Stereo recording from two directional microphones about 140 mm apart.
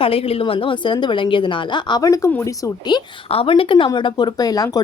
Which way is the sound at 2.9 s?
35° left (ahead or behind).